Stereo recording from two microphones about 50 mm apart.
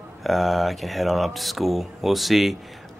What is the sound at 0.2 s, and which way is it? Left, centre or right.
Speech, centre.